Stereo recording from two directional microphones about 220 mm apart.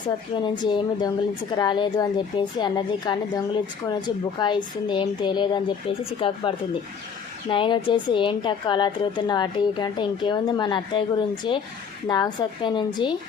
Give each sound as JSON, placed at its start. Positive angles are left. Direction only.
{"t": 0.5, "sound": "a woman's voice", "side_deg": 20}
{"t": 7.5, "sound": "a woman's voice", "side_deg": 20}